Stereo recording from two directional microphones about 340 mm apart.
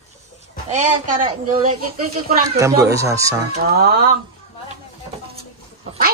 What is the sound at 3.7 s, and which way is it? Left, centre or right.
Speech, right.